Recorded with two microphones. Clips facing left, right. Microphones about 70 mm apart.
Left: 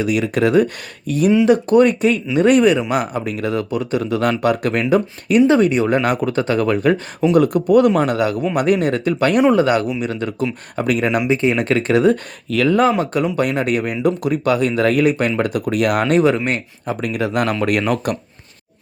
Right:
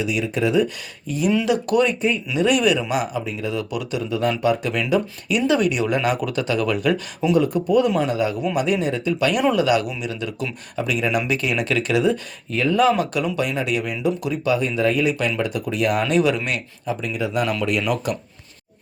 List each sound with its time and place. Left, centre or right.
0.0 s speech: left
1.5 s speech: left
1.8 s speech: left
2.3 s speech: left
2.9 s speech: left
3.6 s speech: left
4.0 s speech: left
7.3 s speech: left
9.4 s speech: left
11.3 s speech: left
12.5 s speech: left
13.3 s speech: left
16.8 s speech: left